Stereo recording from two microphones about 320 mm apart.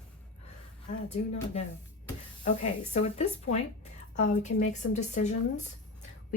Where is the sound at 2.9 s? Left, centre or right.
Centre.